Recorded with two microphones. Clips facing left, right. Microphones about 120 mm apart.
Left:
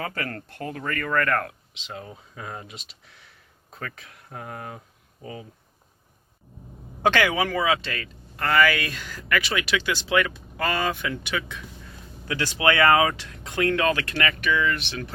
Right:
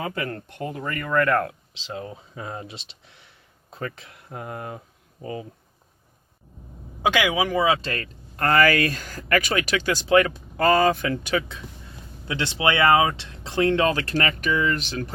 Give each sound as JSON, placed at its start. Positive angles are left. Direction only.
{"t": 0.0, "sound": "speech", "side_deg": -20}
{"t": 5.2, "sound": "speech", "side_deg": -35}
{"t": 7.0, "sound": "speech", "side_deg": -10}
{"t": 7.8, "sound": "speech", "side_deg": -40}
{"t": 12.3, "sound": "speech", "side_deg": -25}